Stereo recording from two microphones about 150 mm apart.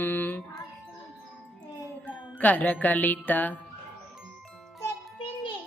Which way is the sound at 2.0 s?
10° left (ahead or behind).